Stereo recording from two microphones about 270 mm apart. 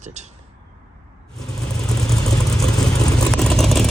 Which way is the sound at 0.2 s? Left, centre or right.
Right.